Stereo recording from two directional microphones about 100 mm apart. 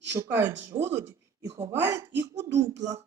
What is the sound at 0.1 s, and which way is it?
A woman's voice, 20° right (ahead or behind).